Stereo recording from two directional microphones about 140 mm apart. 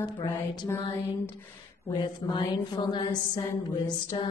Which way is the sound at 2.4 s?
35° left (ahead or behind).